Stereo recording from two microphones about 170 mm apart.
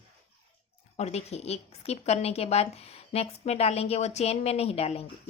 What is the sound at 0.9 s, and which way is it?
A woman's voice, 40° left (ahead or behind).